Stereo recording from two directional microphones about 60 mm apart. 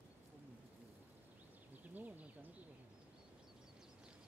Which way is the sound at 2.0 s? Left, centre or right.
Right.